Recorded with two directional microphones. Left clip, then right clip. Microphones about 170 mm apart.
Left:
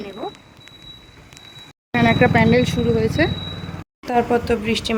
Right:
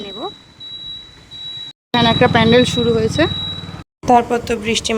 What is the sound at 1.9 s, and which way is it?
Speech, 10° left (ahead or behind).